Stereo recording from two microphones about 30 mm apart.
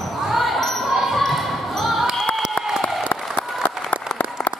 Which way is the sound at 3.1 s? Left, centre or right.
Left.